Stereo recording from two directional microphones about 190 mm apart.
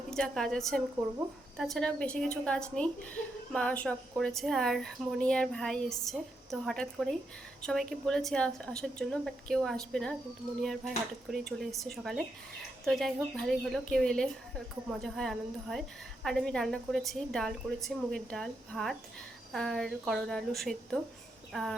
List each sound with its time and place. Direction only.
0.1 s speech: 5° left (ahead or behind)